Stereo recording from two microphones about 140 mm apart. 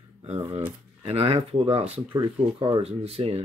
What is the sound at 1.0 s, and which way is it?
Speech, 45° right (ahead or behind).